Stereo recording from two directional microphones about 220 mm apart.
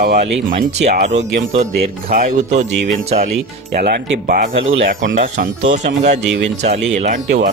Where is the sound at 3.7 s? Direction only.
45° right (ahead or behind).